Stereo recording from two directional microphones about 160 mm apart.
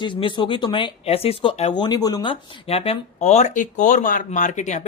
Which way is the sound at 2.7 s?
40° left (ahead or behind).